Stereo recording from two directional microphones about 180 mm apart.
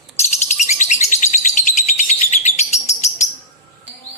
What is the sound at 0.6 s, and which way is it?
Bird, 40° left (ahead or behind).